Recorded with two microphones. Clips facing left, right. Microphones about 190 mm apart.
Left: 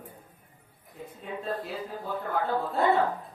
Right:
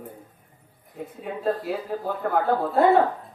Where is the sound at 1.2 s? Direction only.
65° right (ahead or behind).